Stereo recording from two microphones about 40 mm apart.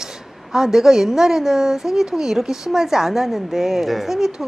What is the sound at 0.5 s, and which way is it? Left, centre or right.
Speech, centre.